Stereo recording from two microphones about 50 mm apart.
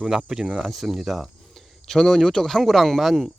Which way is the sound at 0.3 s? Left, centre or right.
Centre.